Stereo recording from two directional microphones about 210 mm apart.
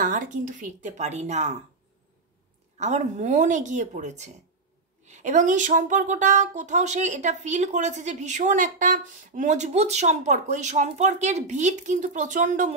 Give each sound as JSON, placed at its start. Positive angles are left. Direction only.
{"t": 0.0, "sound": "a woman's voice", "side_deg": -40}
{"t": 2.8, "sound": "a woman's voice", "side_deg": -35}